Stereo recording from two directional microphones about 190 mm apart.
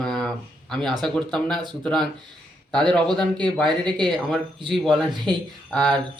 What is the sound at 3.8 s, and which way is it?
Speech, 25° right (ahead or behind).